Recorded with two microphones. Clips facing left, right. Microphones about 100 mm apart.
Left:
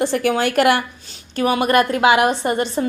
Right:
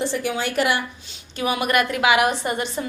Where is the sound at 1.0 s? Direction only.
45° left (ahead or behind).